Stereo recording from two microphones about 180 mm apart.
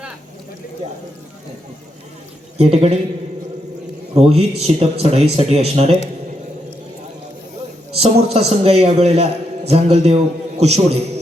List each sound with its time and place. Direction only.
2.6 s a man's voice: 35° right (ahead or behind)
4.1 s a man's voice: 35° right (ahead or behind)
7.9 s a man's voice: 35° right (ahead or behind)